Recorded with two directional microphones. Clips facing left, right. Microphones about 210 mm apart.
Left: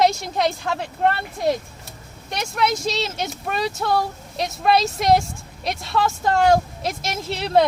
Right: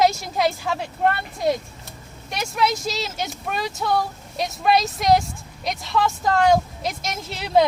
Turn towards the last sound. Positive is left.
turn(degrees=0)  # may be behind; listen again after turning